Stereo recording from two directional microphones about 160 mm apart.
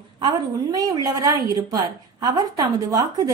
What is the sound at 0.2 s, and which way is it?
A woman's voice, 25° right (ahead or behind).